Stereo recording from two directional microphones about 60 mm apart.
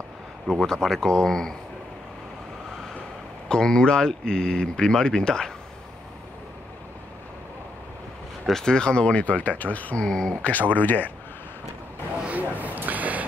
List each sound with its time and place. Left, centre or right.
0.6 s speech: centre
3.4 s speech: centre
8.5 s speech: centre; by 10.0 s left
10.0 s speech: centre
10.8 s speech: left
12.3 s a sound: right